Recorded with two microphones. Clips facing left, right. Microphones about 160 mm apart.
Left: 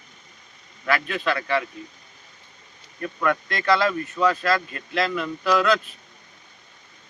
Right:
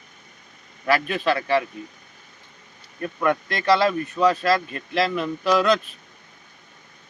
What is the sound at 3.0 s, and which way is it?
Speech, 25° right (ahead or behind).